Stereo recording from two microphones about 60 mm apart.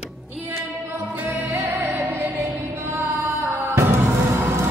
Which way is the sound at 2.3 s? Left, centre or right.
Right.